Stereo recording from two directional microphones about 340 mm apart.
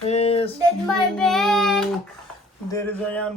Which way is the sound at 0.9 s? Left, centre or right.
Centre.